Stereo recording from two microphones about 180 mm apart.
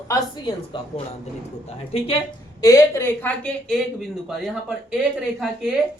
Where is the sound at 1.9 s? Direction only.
35° left (ahead or behind).